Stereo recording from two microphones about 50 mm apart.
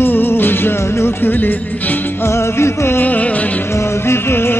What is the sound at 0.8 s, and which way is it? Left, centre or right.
Music, left.